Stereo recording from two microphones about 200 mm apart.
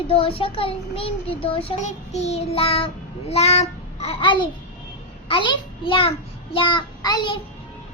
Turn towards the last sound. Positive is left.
turn(degrees=20)  # may be behind; listen again after turning